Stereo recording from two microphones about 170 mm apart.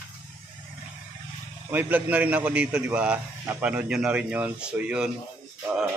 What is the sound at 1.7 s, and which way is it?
A man's voice, 10° right (ahead or behind).